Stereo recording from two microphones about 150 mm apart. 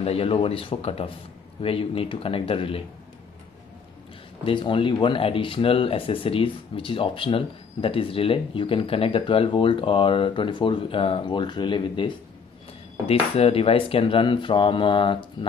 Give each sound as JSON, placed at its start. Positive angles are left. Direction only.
{"t": 0.0, "sound": "speech", "side_deg": 40}
{"t": 4.5, "sound": "speech", "side_deg": 35}